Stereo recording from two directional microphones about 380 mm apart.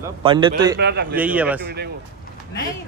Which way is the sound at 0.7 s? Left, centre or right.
Right.